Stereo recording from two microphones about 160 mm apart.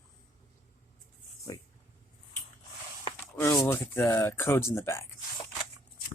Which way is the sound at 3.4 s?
15° left (ahead or behind).